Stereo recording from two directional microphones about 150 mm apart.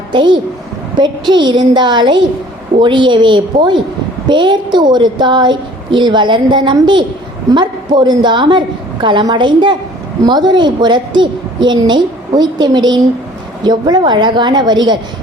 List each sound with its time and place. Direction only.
0.1 s a woman's voice: 30° right (ahead or behind)